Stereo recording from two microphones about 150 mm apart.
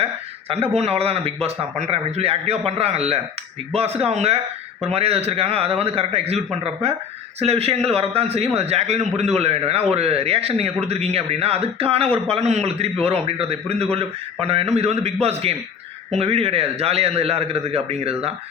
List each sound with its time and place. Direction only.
0.0 s a man's voice: 40° right (ahead or behind)